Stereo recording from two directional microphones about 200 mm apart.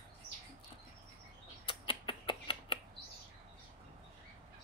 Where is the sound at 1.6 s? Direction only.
25° left (ahead or behind).